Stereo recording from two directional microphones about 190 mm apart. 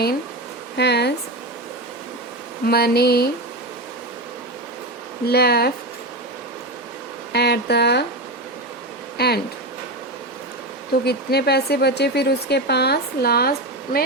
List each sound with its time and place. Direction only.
0.8 s speech: 60° left (ahead or behind)
2.6 s speech: 55° left (ahead or behind)
5.2 s speech: 55° left (ahead or behind)
7.3 s speech: 60° left (ahead or behind)
9.1 s speech: 55° left (ahead or behind)
11.0 s speech: 55° left (ahead or behind)